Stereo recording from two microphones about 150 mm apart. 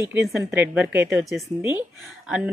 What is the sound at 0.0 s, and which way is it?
A woman's voice, 20° right (ahead or behind).